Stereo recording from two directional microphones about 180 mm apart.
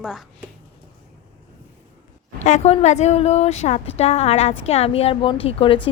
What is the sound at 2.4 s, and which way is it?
A woman's voice, 40° left (ahead or behind).